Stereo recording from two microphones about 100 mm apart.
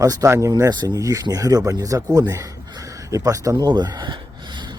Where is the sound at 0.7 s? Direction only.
45° right (ahead or behind).